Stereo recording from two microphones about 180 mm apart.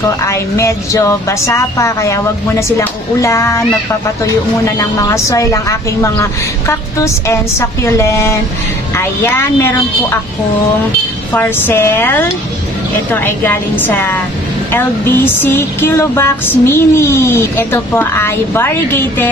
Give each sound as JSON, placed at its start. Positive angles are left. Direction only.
{"t": 0.2, "sound": "music", "side_deg": 15}
{"t": 11.3, "sound": "music", "side_deg": 10}